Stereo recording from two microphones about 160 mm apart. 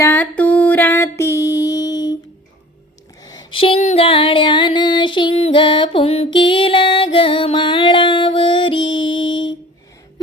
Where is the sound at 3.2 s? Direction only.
30° left (ahead or behind).